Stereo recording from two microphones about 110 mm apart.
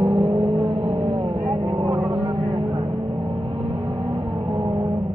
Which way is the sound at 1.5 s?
45° right (ahead or behind).